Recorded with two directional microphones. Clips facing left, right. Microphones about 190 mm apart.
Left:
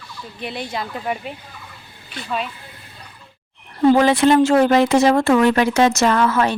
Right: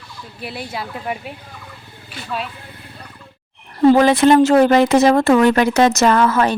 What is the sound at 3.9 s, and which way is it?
Speech, 45° right (ahead or behind).